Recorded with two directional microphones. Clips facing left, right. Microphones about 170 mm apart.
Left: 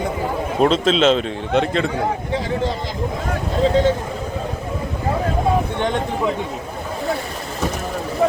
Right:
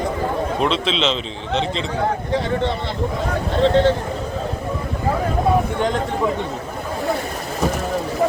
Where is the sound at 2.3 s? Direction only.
35° right (ahead or behind).